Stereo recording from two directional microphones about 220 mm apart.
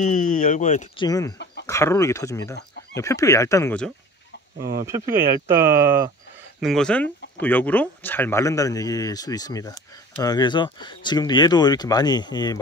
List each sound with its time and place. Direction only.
0.0 s speech: 35° left (ahead or behind)
0.9 s speech: 15° left (ahead or behind)
1.4 s chicken: 50° left (ahead or behind)
1.7 s speech: 15° left (ahead or behind)
4.6 s speech: 45° right (ahead or behind)
6.6 s speech: centre (ahead or behind); by 12.5 s 20° left (ahead or behind)